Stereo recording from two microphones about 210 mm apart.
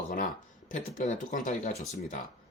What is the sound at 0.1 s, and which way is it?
Speech, 40° left (ahead or behind).